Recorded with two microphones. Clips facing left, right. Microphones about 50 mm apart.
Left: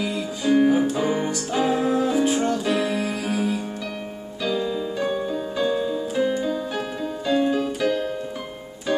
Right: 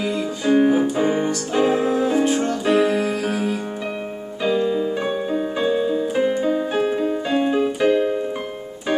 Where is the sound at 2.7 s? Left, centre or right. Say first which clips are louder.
Right 6 dB; right.